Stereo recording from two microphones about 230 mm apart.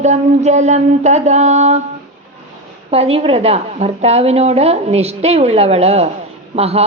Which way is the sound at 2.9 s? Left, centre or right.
Right.